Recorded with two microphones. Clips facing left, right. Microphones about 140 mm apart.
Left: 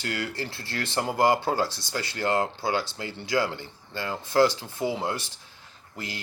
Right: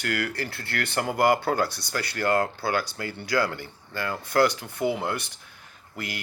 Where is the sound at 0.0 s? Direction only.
25° left (ahead or behind).